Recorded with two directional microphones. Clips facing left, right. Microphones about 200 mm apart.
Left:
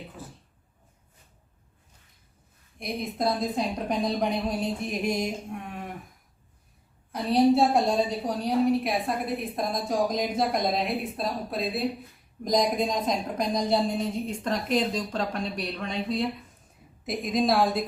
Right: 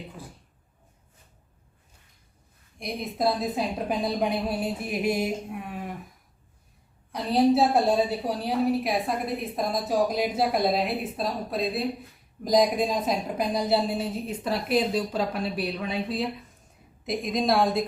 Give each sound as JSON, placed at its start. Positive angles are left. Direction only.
{"t": 2.7, "sound": "a woman's voice", "side_deg": 0}
{"t": 7.1, "sound": "a woman's voice", "side_deg": 0}